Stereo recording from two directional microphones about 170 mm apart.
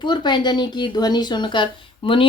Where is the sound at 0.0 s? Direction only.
25° left (ahead or behind).